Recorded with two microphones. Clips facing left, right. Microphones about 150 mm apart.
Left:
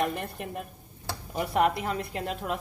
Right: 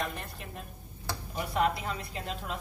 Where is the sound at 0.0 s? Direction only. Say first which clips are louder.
Left 7 dB; 60° left (ahead or behind).